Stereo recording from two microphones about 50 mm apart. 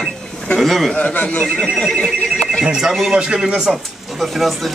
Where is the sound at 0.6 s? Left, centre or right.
Centre.